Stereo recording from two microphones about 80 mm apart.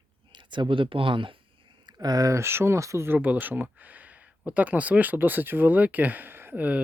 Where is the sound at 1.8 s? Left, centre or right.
Right.